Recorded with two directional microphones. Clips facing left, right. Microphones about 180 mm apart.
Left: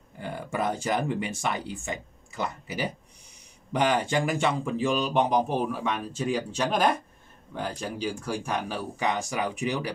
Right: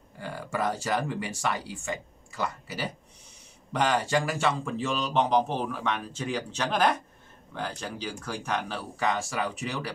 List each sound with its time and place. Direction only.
0.2 s speech: 20° left (ahead or behind)